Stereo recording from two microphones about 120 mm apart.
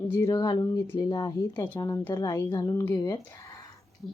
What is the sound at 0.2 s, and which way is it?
Speech, 30° left (ahead or behind).